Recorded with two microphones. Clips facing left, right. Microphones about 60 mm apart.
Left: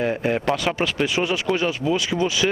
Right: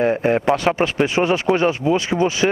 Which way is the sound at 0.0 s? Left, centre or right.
Right.